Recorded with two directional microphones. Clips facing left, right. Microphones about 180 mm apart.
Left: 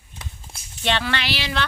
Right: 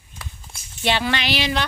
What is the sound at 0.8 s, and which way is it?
Speech, 15° right (ahead or behind).